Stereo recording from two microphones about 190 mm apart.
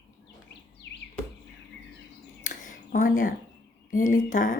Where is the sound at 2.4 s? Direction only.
45° left (ahead or behind).